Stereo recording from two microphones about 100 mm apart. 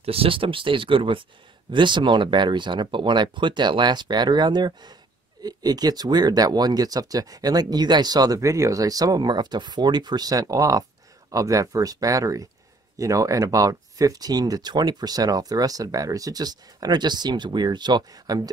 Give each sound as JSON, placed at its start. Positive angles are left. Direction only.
{"t": 0.0, "sound": "speech", "side_deg": -70}